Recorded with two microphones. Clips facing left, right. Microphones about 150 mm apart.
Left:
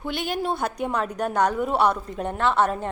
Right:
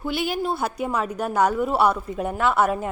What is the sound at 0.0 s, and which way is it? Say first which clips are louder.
A woman's voice: right 2 dB; 5° right (ahead or behind).